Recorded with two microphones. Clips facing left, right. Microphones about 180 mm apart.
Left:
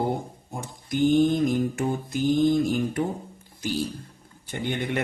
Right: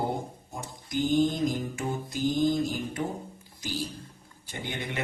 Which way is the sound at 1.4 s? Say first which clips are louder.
Left 6 dB; 55° left (ahead or behind).